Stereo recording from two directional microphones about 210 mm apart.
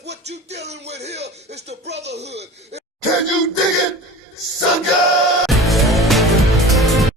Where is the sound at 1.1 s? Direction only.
55° right (ahead or behind).